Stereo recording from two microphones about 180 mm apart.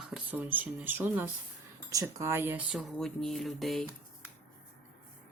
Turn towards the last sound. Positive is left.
turn(degrees=0)  # may be behind; listen again after turning